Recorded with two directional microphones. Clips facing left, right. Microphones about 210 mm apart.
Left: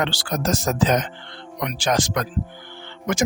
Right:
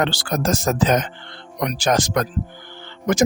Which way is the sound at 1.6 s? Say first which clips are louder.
Right 3 dB; 40° right (ahead or behind).